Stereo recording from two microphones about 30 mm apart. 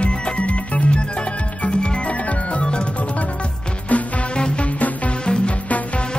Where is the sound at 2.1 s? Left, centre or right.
Left.